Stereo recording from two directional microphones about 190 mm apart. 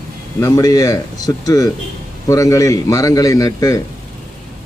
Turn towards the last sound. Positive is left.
turn(degrees=20)  # may be behind; listen again after turning